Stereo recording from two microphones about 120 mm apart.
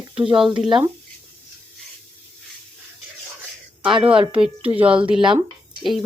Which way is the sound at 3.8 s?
45° right (ahead or behind).